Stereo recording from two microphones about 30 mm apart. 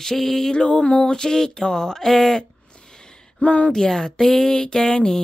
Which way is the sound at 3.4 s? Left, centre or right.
Left.